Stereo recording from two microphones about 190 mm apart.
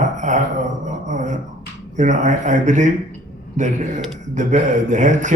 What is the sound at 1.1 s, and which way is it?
Dog, 40° right (ahead or behind).